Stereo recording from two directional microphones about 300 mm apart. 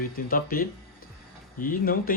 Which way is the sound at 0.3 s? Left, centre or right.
Left.